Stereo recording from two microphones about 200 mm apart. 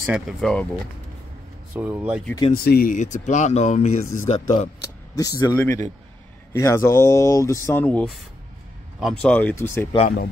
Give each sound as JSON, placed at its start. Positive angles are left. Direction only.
{"t": 0.0, "sound": "speech", "side_deg": -5}
{"t": 1.8, "sound": "speech", "side_deg": -10}
{"t": 2.5, "sound": "speech", "side_deg": 50}
{"t": 5.1, "sound": "speech", "side_deg": 15}